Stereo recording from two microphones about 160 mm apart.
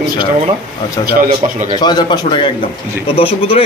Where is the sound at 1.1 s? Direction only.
60° right (ahead or behind).